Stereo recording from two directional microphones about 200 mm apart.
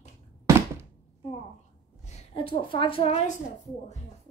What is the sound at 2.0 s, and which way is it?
A woman's voice, 30° left (ahead or behind).